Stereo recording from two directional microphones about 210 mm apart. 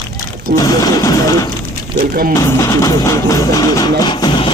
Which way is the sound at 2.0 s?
45° right (ahead or behind).